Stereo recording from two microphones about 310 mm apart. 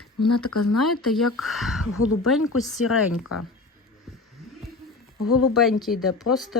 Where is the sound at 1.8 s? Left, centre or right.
Left.